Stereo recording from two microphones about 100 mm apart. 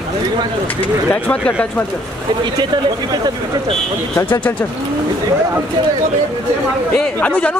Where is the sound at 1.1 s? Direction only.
15° left (ahead or behind).